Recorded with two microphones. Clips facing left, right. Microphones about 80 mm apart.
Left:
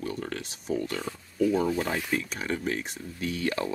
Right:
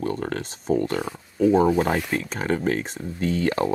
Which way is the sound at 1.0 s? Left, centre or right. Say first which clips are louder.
Right 4 dB; right.